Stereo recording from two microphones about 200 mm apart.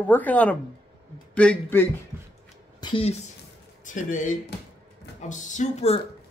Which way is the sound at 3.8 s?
40° left (ahead or behind).